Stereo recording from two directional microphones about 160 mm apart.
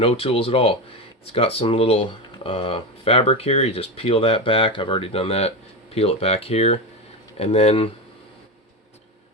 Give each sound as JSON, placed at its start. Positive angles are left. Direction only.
{"t": 0.0, "sound": "speech", "side_deg": 35}